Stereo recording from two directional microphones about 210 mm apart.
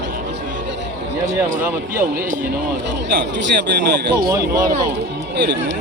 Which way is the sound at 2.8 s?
55° right (ahead or behind).